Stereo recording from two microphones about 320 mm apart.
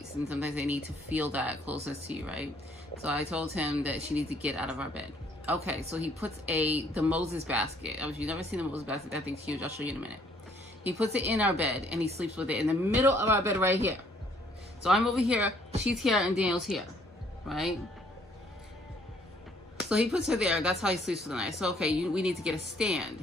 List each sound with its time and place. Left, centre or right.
0.2 s a woman's voice: centre
19.8 s speech: centre